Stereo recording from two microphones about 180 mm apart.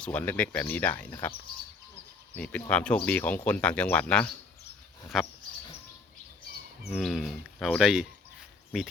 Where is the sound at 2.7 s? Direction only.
5° left (ahead or behind).